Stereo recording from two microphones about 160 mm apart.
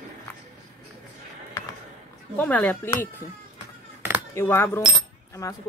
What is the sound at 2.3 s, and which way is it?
Speech, 10° left (ahead or behind).